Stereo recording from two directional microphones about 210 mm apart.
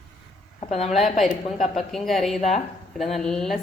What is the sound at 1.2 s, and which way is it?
Speech, centre (ahead or behind).